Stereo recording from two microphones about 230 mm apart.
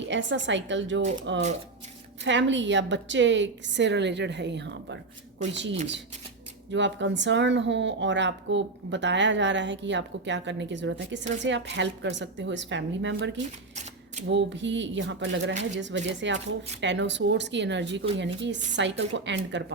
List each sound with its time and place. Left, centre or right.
0.0 s a woman's voice: right
6.7 s a woman's voice: right